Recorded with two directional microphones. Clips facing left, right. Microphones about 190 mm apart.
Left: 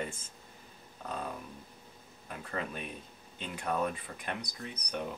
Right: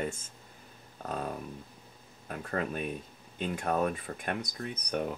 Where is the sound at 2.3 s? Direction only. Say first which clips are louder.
Right 5 dB; 50° right (ahead or behind).